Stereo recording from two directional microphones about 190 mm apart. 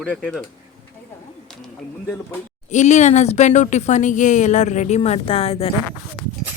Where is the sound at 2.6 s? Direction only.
40° left (ahead or behind).